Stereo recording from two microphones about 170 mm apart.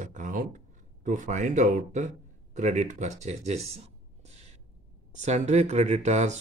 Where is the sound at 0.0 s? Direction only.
50° right (ahead or behind).